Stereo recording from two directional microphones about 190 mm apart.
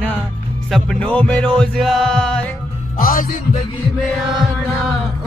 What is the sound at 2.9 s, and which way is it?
Music, 50° left (ahead or behind).